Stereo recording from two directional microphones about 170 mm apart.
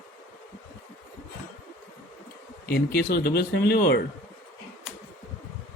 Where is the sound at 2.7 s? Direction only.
70° left (ahead or behind).